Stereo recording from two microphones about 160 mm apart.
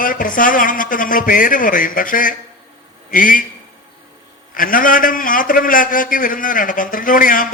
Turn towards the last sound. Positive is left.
turn(degrees=60)  # may be behind; listen again after turning